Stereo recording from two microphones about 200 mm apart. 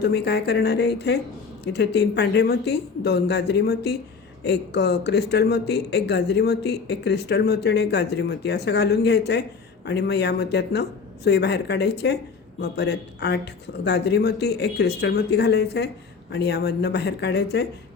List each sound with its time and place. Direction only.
0.0 s speech: 55° left (ahead or behind)